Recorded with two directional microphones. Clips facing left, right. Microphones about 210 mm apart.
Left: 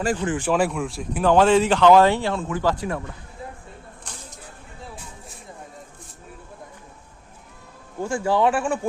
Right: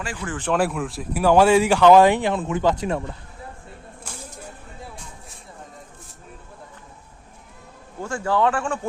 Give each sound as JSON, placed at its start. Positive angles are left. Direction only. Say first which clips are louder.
{"t": 0.2, "sound": "speech", "louder": "left 6 dB", "side_deg": 20}
{"t": 0.4, "sound": "speech", "louder": "right 2 dB", "side_deg": 0}
{"t": 4.1, "sound": "a sound", "louder": "right 4 dB", "side_deg": -10}
{"t": 8.0, "sound": "speech", "louder": "left 1 dB", "side_deg": 15}